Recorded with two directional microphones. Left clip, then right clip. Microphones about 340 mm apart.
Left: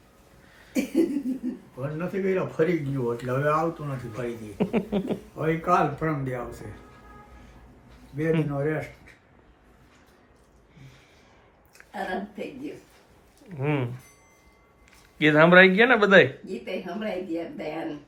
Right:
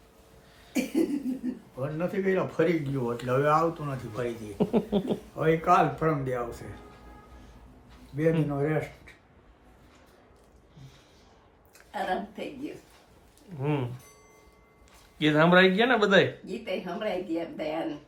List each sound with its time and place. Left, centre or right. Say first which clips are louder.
0.7 s a sound: left 3 dB; centre
1.9 s speech: left 1 dB; centre
8.1 s speech: even; right
11.9 s a woman's voice: right 1 dB; centre
15.2 s speech: left 5 dB; centre